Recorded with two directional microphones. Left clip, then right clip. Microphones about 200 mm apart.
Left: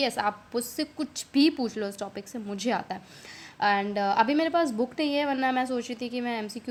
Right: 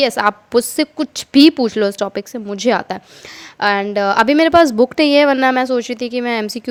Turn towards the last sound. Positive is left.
turn(degrees=-50)  # may be behind; listen again after turning